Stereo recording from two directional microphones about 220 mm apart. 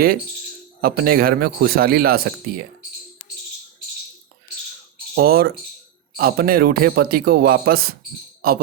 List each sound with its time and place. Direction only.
0.8 s a man's voice: 45° right (ahead or behind)
5.1 s a man's voice: 45° right (ahead or behind)